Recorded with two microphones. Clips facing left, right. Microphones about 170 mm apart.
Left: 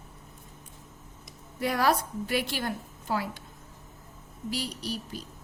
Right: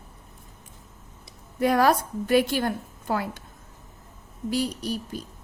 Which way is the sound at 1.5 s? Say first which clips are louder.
Right 5 dB; 50° right (ahead or behind).